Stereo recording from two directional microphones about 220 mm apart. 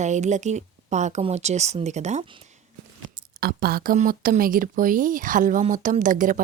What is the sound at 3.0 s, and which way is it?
Speech, 45° right (ahead or behind).